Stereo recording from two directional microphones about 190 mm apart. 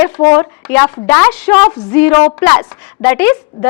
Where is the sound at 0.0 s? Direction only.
10° left (ahead or behind).